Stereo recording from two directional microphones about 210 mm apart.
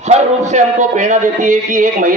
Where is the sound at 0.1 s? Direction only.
35° right (ahead or behind).